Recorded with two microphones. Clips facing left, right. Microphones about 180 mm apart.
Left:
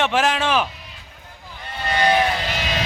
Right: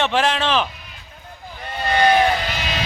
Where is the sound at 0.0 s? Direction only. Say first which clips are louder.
Even; 10° left (ahead or behind).